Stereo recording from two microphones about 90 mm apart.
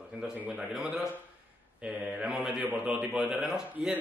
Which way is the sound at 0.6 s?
10° right (ahead or behind).